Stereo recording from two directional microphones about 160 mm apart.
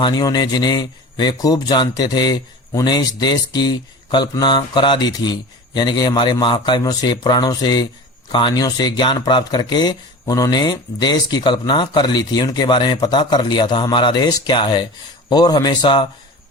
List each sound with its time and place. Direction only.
0.0 s a man's voice: 25° left (ahead or behind)